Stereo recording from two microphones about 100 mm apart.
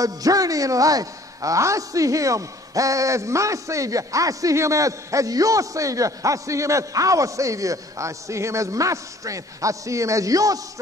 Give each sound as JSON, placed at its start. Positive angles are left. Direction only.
{"t": 0.0, "sound": "a man's voice", "side_deg": -35}